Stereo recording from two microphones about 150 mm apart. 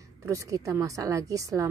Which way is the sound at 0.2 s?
20° right (ahead or behind).